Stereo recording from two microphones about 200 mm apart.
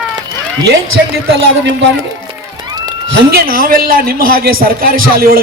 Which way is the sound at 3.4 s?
45° right (ahead or behind).